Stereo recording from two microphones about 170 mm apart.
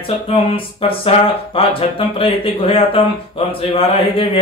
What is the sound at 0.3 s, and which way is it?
Speech, 35° left (ahead or behind).